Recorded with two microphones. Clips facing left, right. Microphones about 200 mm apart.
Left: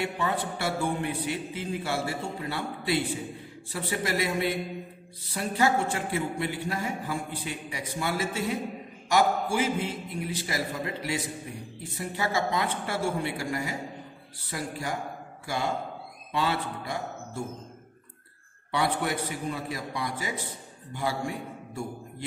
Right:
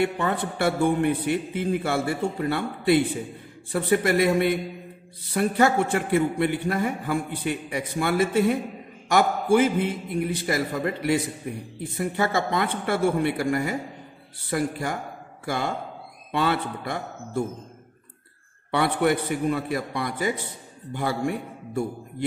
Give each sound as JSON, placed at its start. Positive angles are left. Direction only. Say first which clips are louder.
{"t": 0.0, "sound": "a man's voice", "louder": "right 5 dB", "side_deg": -55}
{"t": 18.7, "sound": "a man's voice", "louder": "right 6 dB", "side_deg": -60}